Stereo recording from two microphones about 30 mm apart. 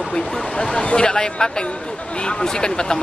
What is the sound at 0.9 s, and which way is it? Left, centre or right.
Speech, left.